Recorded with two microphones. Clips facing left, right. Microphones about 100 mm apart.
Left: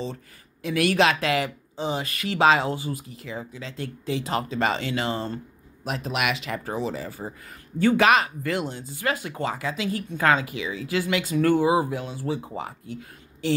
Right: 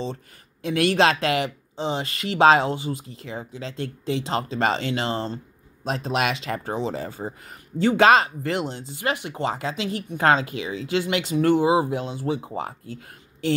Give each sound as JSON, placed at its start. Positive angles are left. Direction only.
{"t": 0.0, "sound": "speech", "side_deg": -30}
{"t": 5.9, "sound": "speech", "side_deg": -30}